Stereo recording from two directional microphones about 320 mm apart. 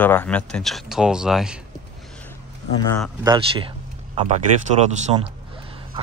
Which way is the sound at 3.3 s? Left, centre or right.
Centre.